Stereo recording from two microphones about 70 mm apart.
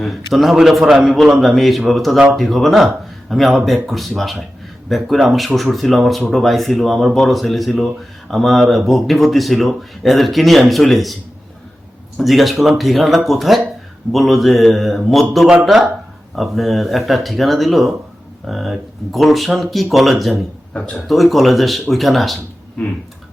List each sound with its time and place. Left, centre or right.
0.0 s a man's voice: centre
20.7 s speech: centre
21.1 s speech: centre
22.8 s speech: centre